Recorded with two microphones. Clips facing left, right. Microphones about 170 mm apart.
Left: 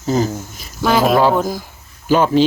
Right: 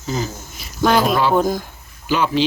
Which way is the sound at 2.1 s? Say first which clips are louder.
Left 5 dB; 45° left (ahead or behind).